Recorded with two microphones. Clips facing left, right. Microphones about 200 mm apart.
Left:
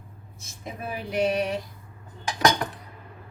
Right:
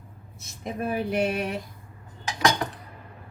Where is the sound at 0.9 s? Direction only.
55° right (ahead or behind).